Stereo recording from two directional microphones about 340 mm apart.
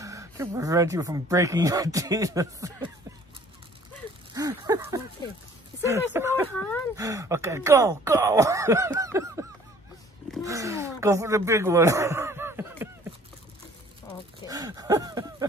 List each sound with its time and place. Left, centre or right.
0.0 s speech: centre
4.3 s speech: centre
14.4 s speech: centre